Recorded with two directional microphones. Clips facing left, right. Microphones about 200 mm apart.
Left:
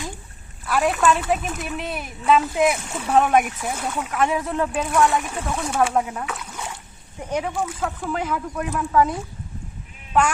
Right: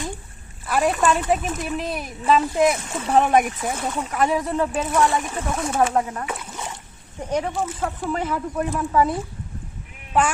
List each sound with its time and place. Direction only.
0.6 s speech: centre (ahead or behind)
6.2 s boat: 10° right (ahead or behind)
7.3 s speech: 5° left (ahead or behind)
10.1 s sheep: 5° right (ahead or behind)